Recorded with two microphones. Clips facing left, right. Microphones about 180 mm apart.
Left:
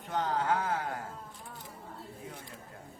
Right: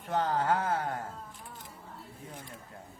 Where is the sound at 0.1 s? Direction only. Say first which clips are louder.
Right 2 dB; 45° right (ahead or behind).